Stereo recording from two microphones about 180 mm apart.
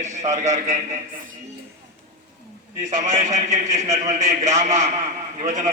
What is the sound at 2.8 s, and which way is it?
A man's voice, 45° right (ahead or behind).